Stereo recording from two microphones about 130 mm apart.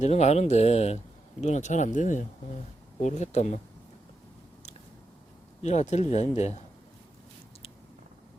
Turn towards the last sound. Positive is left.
turn(degrees=55)  # may be behind; listen again after turning